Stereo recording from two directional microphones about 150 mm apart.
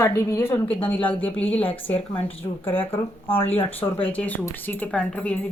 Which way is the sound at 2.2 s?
40° left (ahead or behind).